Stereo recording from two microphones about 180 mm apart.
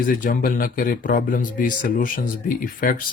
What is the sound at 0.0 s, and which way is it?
Speech, 50° left (ahead or behind).